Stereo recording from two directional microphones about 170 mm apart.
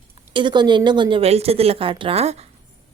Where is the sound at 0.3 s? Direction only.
25° right (ahead or behind).